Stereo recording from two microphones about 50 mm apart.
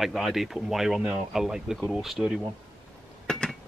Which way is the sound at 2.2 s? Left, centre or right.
Right.